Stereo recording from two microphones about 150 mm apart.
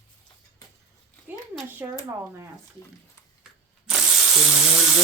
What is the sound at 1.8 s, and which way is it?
Speech, 15° right (ahead or behind).